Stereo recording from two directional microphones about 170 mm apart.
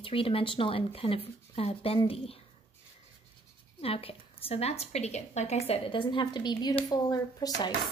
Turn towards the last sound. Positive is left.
turn(degrees=20)  # may be behind; listen again after turning